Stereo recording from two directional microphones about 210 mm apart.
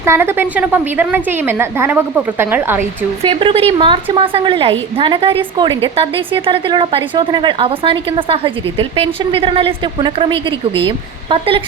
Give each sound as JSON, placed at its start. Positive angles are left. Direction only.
{"t": 0.0, "sound": "a woman's voice", "side_deg": -10}
{"t": 3.4, "sound": "a woman's voice", "side_deg": -25}